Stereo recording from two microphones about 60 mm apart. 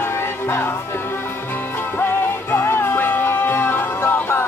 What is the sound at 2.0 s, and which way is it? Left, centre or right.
Music, left.